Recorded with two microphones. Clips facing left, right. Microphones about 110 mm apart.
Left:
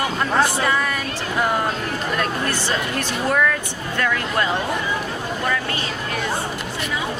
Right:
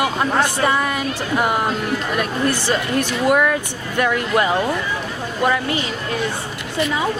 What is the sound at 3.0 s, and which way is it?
Speech, 15° right (ahead or behind).